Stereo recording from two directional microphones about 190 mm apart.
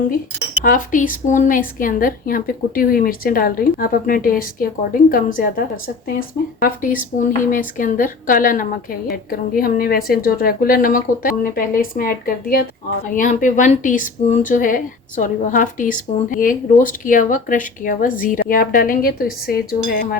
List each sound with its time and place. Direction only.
0.6 s speech: 45° left (ahead or behind)